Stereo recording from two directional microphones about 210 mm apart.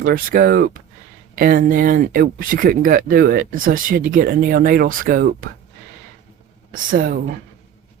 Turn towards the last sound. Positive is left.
turn(degrees=-45)  # may be behind; listen again after turning